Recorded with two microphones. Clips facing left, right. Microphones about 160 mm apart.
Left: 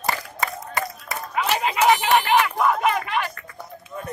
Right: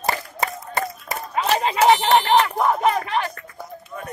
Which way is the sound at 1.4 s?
30° right (ahead or behind).